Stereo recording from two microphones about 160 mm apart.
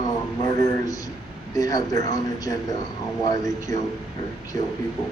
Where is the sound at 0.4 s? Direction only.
25° left (ahead or behind).